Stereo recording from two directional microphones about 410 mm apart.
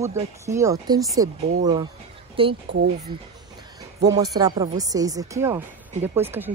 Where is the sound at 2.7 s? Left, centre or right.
Right.